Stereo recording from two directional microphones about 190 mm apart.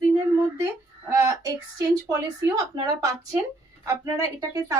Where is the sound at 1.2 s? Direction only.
15° right (ahead or behind).